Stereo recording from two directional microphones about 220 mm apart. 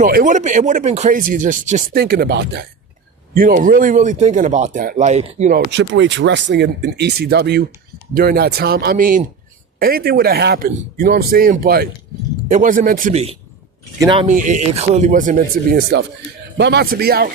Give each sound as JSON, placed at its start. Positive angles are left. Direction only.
{"t": 0.0, "sound": "speech", "side_deg": -40}
{"t": 5.5, "sound": "speech", "side_deg": -55}
{"t": 14.0, "sound": "speech", "side_deg": -20}
{"t": 14.3, "sound": "speech", "side_deg": -35}